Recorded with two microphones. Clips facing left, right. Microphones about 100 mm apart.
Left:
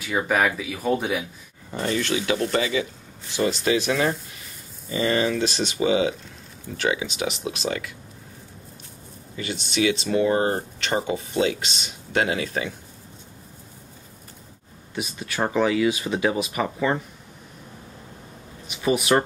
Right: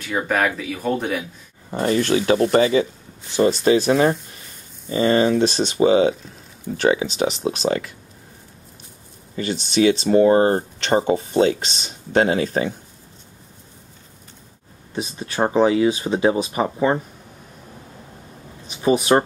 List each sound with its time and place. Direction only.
0.0 s speech: 5° left (ahead or behind)
1.7 s speech: 35° right (ahead or behind)
9.4 s speech: 35° right (ahead or behind)
15.0 s speech: 30° right (ahead or behind)
18.7 s speech: 30° right (ahead or behind)